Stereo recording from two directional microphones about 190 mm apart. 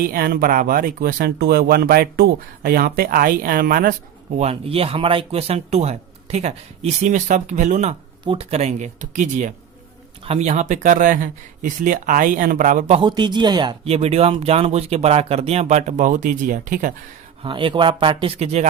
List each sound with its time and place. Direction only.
0.0 s speech: 50° right (ahead or behind)
4.4 s speech: 30° right (ahead or behind)
13.0 s speech: 25° right (ahead or behind); by 16.9 s 45° right (ahead or behind)
17.4 s speech: 25° right (ahead or behind)